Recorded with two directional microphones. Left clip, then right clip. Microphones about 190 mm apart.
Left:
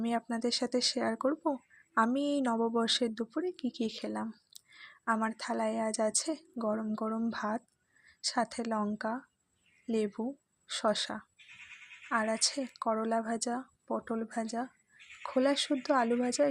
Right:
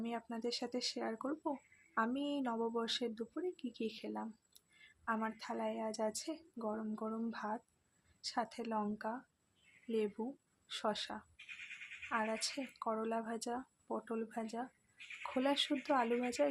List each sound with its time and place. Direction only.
0.0 s a woman's voice: 45° left (ahead or behind)
10.2 s a woman's voice: 50° left (ahead or behind)
10.7 s a woman's voice: 40° left (ahead or behind)